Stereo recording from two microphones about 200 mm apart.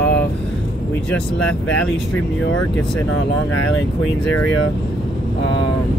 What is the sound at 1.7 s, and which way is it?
Speech, 5° left (ahead or behind).